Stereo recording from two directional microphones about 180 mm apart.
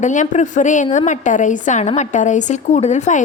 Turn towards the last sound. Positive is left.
turn(degrees=40)  # may be behind; listen again after turning